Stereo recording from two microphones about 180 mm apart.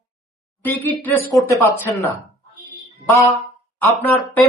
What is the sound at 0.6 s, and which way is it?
Speech, 10° left (ahead or behind).